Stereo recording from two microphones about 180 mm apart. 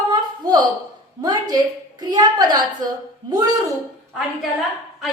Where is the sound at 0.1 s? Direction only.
20° right (ahead or behind).